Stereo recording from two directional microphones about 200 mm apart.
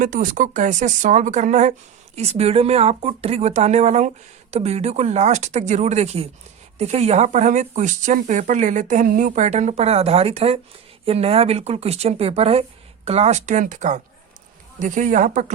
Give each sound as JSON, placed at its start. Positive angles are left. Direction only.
{"t": 0.0, "sound": "speech", "side_deg": -40}